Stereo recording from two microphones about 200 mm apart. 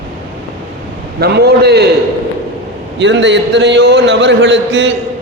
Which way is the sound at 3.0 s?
60° right (ahead or behind).